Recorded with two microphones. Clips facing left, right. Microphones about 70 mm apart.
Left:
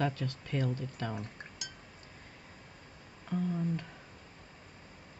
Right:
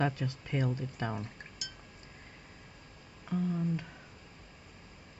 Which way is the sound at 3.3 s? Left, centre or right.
Centre.